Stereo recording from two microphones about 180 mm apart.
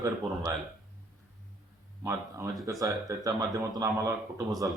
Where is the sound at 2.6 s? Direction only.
20° right (ahead or behind).